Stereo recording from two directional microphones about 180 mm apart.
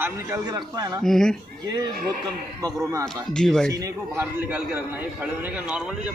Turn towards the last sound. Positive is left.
turn(degrees=-5)  # may be behind; listen again after turning